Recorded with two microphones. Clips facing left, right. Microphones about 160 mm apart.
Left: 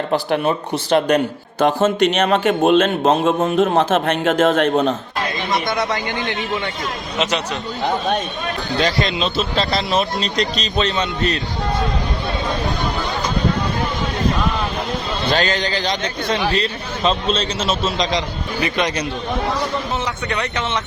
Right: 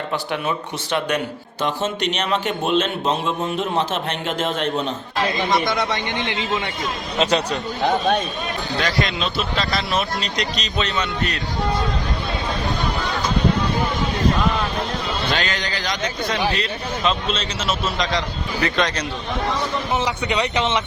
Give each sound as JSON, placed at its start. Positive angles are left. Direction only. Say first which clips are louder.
{"t": 0.1, "sound": "speech", "louder": "left 7 dB", "side_deg": 35}
{"t": 1.6, "sound": "a man's voice", "louder": "left 8 dB", "side_deg": 50}
{"t": 7.2, "sound": "speech", "louder": "right 2 dB", "side_deg": -35}
{"t": 8.8, "sound": "speech", "louder": "left 4 dB", "side_deg": 25}
{"t": 15.3, "sound": "a man's voice", "louder": "left 5 dB", "side_deg": 35}
{"t": 20.2, "sound": "speech", "louder": "right 2 dB", "side_deg": -15}